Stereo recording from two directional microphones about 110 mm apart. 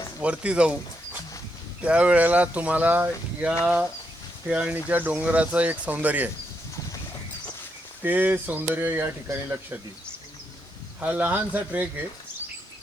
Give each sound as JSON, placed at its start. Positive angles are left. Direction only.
{"t": 0.2, "sound": "speech", "side_deg": -10}
{"t": 1.8, "sound": "speech", "side_deg": -10}
{"t": 8.0, "sound": "speech", "side_deg": -15}
{"t": 11.0, "sound": "speech", "side_deg": -15}